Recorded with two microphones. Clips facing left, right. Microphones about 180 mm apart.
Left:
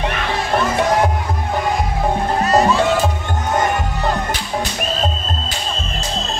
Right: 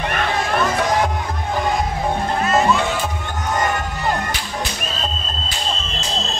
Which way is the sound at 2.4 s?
35° left (ahead or behind).